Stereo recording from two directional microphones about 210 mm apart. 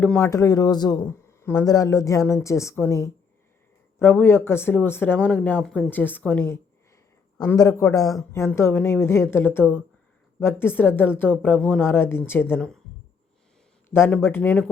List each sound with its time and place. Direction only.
0.0 s speech: 5° left (ahead or behind)
0.3 s speech: 15° left (ahead or behind)
13.9 s speech: 10° left (ahead or behind)